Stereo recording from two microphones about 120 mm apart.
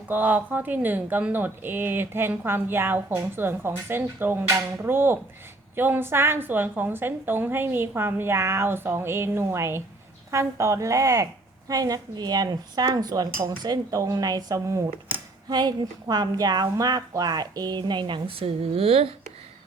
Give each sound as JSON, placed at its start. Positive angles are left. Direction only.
{"t": 0.1, "sound": "a woman's voice", "side_deg": -15}